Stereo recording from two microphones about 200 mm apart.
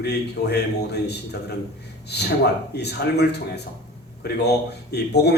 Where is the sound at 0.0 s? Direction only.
55° left (ahead or behind).